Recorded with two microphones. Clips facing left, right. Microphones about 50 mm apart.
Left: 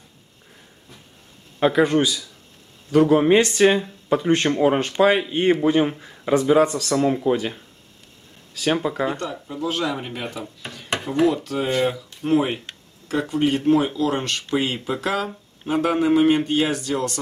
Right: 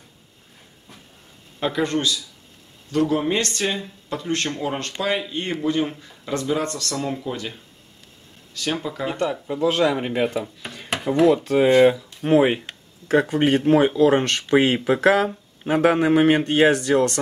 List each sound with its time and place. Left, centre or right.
1.6 s speech: centre
9.2 s speech: right
9.9 s speech: right
11.7 s speech: centre
12.7 s a sound: centre
13.1 s speech: right
13.9 s speech: right
14.5 s speech: right